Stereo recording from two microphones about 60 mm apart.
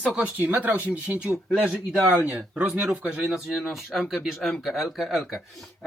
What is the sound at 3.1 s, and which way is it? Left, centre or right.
Speech, centre.